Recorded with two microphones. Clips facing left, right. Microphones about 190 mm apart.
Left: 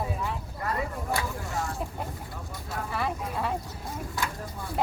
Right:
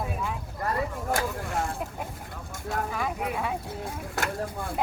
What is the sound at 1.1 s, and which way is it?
Vehicle, 50° right (ahead or behind).